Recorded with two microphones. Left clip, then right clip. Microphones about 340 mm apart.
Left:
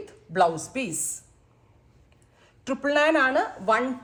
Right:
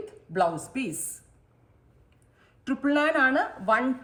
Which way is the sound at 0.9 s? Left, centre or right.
Centre.